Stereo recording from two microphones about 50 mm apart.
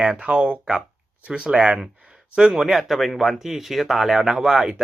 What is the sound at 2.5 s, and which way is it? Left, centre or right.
Speech, centre.